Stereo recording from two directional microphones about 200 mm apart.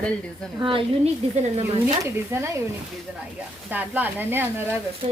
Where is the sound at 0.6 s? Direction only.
25° right (ahead or behind).